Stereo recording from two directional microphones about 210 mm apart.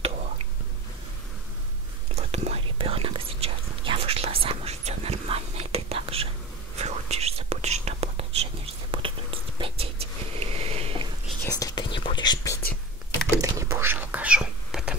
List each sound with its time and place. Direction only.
2.1 s whispering: 30° right (ahead or behind)
11.4 s whispering: 15° left (ahead or behind)
13.4 s whispering: 15° right (ahead or behind)